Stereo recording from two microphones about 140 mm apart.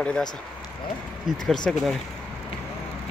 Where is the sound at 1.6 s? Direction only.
Centre (ahead or behind).